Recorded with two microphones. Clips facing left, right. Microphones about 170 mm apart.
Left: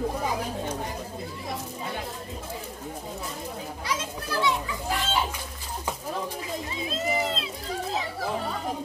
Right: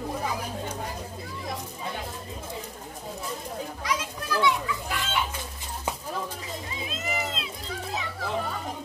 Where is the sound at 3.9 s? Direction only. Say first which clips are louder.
Right 1 dB; 30° left (ahead or behind).